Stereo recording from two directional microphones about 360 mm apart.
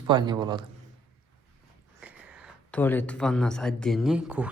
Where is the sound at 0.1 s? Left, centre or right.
Centre.